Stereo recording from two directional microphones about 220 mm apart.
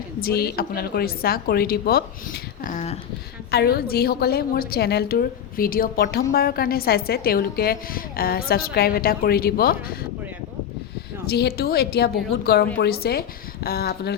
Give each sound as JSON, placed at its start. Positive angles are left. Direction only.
{"t": 0.2, "sound": "a woman's voice", "side_deg": 45}
{"t": 2.6, "sound": "a sound", "side_deg": 30}
{"t": 3.5, "sound": "a woman's voice", "side_deg": 45}
{"t": 11.3, "sound": "a woman's voice", "side_deg": 45}